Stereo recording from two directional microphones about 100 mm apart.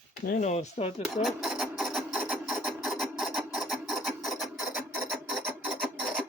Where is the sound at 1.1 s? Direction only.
Centre (ahead or behind).